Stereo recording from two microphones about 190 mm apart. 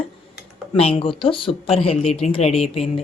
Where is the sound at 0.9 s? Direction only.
30° left (ahead or behind).